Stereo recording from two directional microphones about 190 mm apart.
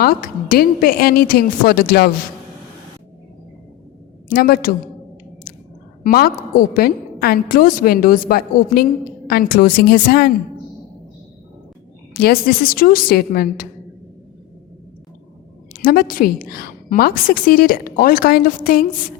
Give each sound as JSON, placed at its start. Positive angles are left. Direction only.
{"t": 0.0, "sound": "a woman's voice", "side_deg": 50}
{"t": 4.3, "sound": "a woman's voice", "side_deg": 50}
{"t": 6.0, "sound": "a woman's voice", "side_deg": 50}
{"t": 12.1, "sound": "a woman's voice", "side_deg": 50}
{"t": 15.7, "sound": "a woman's voice", "side_deg": 50}